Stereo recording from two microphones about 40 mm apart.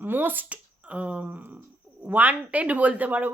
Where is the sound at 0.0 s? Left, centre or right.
Right.